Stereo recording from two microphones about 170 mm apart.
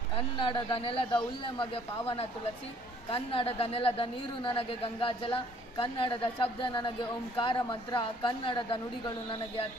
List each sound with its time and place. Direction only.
0.2 s a woman's voice: 30° left (ahead or behind)